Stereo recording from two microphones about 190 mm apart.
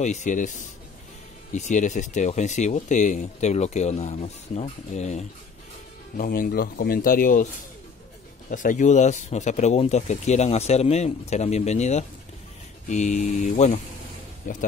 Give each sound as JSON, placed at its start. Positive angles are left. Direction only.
{"t": 0.0, "sound": "speech", "side_deg": 40}
{"t": 1.5, "sound": "speech", "side_deg": 40}
{"t": 6.1, "sound": "speech", "side_deg": 45}
{"t": 8.5, "sound": "speech", "side_deg": 40}